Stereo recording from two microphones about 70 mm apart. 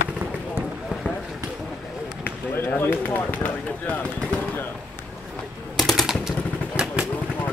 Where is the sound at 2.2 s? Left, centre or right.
Left.